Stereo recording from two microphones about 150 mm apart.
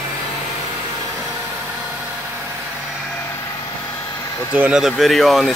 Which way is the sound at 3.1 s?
15° left (ahead or behind).